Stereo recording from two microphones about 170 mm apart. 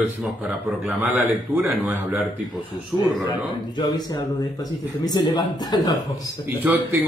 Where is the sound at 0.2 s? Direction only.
5° right (ahead or behind).